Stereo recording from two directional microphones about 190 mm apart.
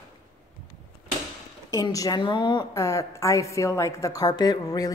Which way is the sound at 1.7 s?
15° left (ahead or behind).